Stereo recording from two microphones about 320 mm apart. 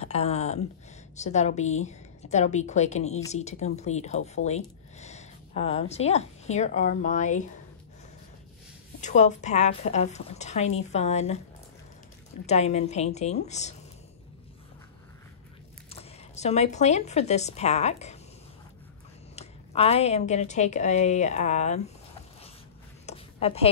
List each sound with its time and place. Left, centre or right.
0.0 s a sound: centre
1.1 s a woman's voice: left
9.0 s a woman's voice: left
12.4 s a woman's voice: left
15.9 s speech: centre
19.3 s a woman's voice: centre
23.0 s a sound: centre